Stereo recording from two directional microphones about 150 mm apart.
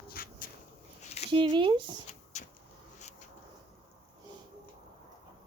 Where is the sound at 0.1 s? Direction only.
75° left (ahead or behind).